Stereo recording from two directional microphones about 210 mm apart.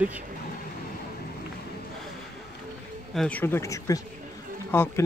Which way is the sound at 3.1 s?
5° left (ahead or behind).